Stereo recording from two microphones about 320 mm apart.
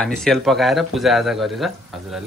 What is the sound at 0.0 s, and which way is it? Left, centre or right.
Speech, centre.